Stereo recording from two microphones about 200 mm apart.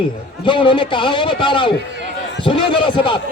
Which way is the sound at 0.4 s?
25° left (ahead or behind).